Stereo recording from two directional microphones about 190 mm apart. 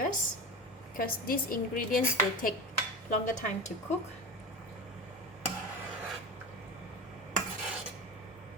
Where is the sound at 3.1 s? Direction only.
40° left (ahead or behind).